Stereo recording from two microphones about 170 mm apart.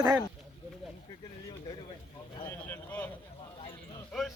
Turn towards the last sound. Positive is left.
turn(degrees=0)  # may be behind; listen again after turning